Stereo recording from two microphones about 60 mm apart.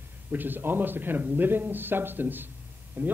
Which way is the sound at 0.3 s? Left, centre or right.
Right.